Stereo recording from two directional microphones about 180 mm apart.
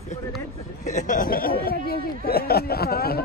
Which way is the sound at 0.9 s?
45° left (ahead or behind).